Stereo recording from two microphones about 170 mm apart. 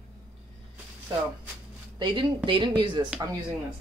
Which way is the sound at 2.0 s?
30° right (ahead or behind).